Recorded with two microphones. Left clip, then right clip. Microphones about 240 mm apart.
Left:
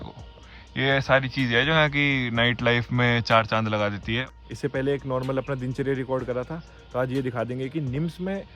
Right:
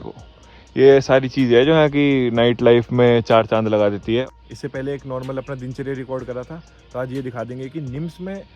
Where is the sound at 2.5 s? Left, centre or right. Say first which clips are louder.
Right 9 dB; centre.